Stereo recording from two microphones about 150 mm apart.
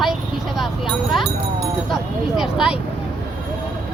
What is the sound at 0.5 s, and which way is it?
Speech, centre (ahead or behind).